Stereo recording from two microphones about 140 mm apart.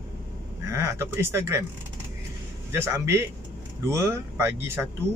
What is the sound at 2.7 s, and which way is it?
Speech, 20° right (ahead or behind).